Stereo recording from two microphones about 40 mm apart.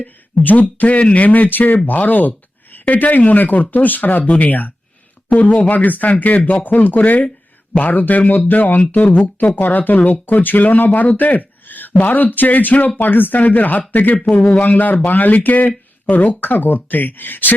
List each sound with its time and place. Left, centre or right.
0.0 s speech: left
1.9 s a sound: left
2.8 s speech: left